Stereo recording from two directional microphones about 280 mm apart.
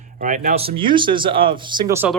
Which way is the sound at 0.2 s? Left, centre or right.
Right.